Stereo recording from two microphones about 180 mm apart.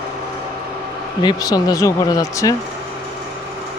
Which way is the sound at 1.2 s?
20° left (ahead or behind).